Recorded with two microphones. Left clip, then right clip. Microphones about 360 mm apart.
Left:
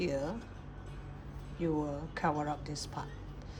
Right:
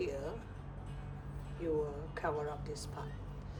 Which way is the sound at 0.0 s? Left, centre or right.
Centre.